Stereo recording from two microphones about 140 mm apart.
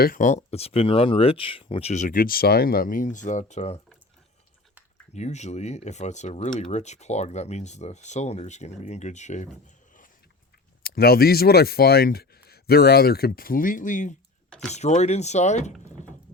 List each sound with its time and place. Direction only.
0.0 s speech: 80° left
0.5 s speech: 45° left (ahead or behind)
1.9 s speech: 65° left (ahead or behind)
5.1 s speech: 55° left (ahead or behind)
10.8 s speech: 90° left; by 15.7 s 55° left (ahead or behind)